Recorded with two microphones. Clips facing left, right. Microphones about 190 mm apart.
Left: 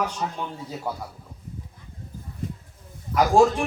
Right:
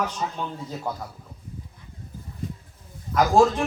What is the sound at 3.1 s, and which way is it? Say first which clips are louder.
Speech: even; 10° left (ahead or behind).